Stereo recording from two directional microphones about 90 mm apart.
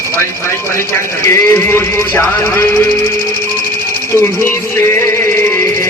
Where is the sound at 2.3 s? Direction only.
30° left (ahead or behind).